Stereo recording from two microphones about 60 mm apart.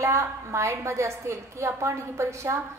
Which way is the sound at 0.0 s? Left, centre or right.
Right.